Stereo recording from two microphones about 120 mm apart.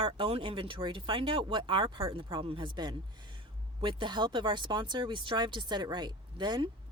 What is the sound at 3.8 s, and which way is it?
Speech, 40° right (ahead or behind).